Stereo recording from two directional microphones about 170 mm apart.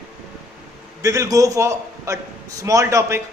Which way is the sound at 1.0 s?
20° right (ahead or behind).